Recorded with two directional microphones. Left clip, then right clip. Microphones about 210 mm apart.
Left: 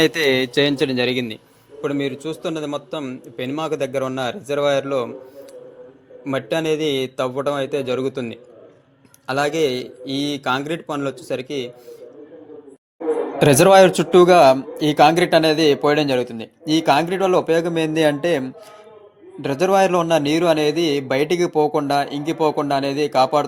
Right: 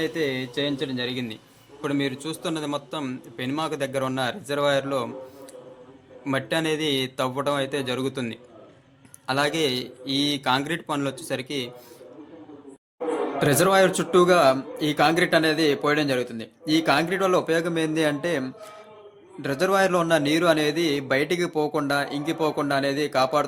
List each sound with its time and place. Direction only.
0.0 s a man's voice: 45° left (ahead or behind); by 1.4 s 25° left (ahead or behind)
1.8 s a man's voice: 10° left (ahead or behind)
6.2 s a man's voice: 10° left (ahead or behind)
13.4 s a man's voice: 30° left (ahead or behind); by 23.5 s 10° left (ahead or behind)